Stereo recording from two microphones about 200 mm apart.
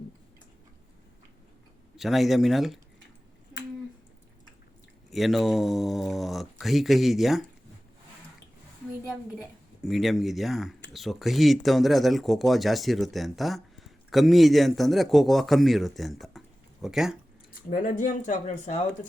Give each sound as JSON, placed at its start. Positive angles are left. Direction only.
{"t": 2.0, "sound": "speech", "side_deg": 0}
{"t": 5.1, "sound": "speech", "side_deg": 0}
{"t": 9.8, "sound": "speech", "side_deg": 0}
{"t": 17.5, "sound": "speech", "side_deg": 45}